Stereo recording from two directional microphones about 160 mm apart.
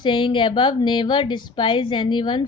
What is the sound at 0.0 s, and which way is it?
A woman's voice, 30° left (ahead or behind).